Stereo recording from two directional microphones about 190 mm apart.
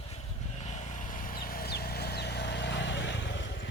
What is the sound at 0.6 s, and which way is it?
Vehicle, 40° left (ahead or behind).